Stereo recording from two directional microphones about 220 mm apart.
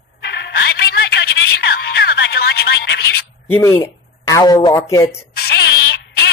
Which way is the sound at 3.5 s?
10° left (ahead or behind).